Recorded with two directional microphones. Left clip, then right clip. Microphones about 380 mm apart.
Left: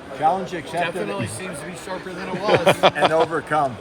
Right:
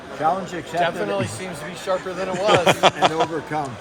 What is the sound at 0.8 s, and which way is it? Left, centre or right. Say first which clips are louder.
Speech: right 4 dB; right.